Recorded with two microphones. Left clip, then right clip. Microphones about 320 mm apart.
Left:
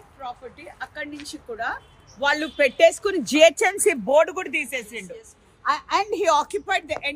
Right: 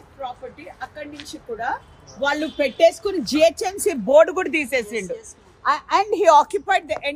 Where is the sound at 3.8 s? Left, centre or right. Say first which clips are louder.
Right 6 dB; centre.